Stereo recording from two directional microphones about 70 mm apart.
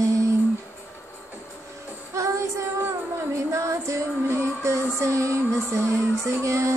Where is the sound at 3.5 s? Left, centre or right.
Right.